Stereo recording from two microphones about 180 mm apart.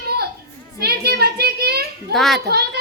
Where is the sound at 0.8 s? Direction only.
60° right (ahead or behind).